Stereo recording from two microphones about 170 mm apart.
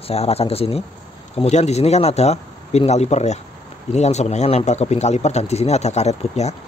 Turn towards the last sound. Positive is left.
turn(degrees=40)  # may be behind; listen again after turning